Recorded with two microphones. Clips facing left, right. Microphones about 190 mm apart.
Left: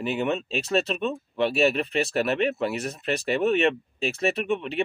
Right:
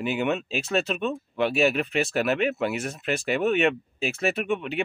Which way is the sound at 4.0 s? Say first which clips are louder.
Left 1 dB; centre (ahead or behind).